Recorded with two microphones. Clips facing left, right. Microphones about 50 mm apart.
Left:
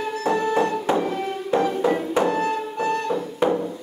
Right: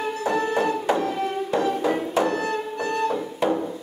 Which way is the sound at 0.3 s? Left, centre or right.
Centre.